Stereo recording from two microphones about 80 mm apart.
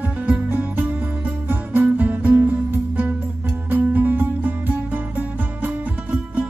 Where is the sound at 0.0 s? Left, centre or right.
Right.